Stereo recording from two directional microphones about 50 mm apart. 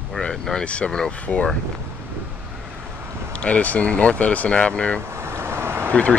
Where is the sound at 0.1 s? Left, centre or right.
Centre.